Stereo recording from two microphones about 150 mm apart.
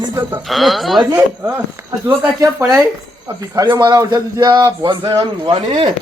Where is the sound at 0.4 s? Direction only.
Centre (ahead or behind).